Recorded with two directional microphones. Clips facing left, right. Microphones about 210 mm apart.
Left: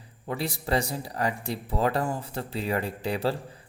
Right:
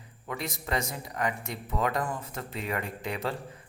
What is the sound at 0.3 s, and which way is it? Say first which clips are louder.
A man's voice: left 5 dB; 30° left (ahead or behind).